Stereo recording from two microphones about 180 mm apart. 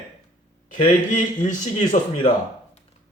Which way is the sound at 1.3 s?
45° left (ahead or behind).